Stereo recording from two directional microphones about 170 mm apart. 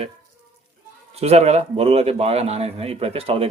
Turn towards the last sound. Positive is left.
turn(degrees=-35)  # may be behind; listen again after turning